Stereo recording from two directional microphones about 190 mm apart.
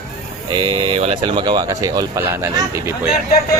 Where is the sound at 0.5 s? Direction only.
30° right (ahead or behind).